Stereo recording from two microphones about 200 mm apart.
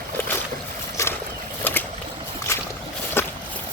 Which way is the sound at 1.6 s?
10° left (ahead or behind).